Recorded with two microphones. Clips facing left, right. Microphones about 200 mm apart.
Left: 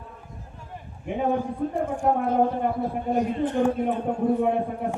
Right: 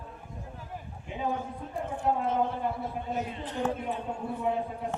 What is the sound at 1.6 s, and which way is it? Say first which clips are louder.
Speech: left 14 dB; 45° left (ahead or behind).